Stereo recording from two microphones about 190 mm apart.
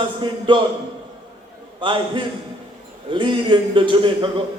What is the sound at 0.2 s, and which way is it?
Speech, 25° right (ahead or behind).